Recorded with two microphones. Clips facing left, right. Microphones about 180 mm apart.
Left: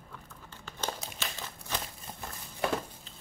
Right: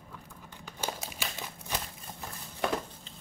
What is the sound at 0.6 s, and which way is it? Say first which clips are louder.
Crumpling: even; 10° right (ahead or behind).